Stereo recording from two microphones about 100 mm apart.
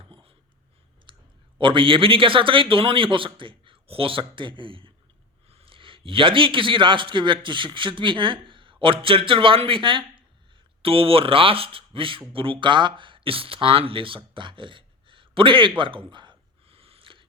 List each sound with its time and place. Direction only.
0.0 s writing: 65° right (ahead or behind)
1.1 s clicking: 55° right (ahead or behind)
1.5 s a man's voice: 55° right (ahead or behind)
5.5 s a man's voice: 70° right (ahead or behind)
10.8 s speech: 70° right (ahead or behind)
15.8 s a sound: 55° right (ahead or behind)